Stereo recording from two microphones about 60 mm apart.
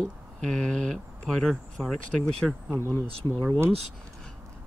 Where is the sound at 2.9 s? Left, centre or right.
Left.